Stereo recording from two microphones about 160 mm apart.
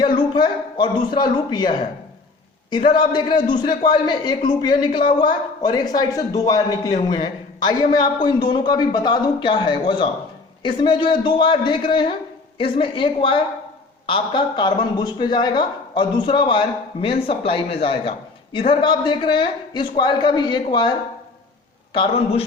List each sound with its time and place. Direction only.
0.2 s a man's voice: 30° left (ahead or behind)
21.9 s a man's voice: 35° left (ahead or behind)